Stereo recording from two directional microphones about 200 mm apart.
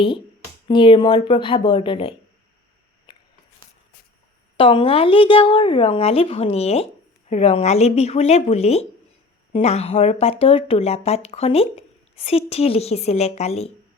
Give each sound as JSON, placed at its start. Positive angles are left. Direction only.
{"t": 0.7, "sound": "speech", "side_deg": 25}
{"t": 3.1, "sound": "a sound", "side_deg": 25}
{"t": 4.5, "sound": "speech", "side_deg": 25}